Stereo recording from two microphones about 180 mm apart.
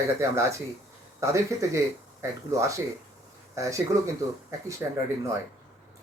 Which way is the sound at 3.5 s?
15° right (ahead or behind).